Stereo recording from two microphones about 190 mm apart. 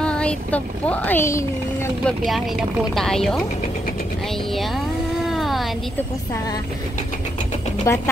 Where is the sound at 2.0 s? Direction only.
Centre (ahead or behind).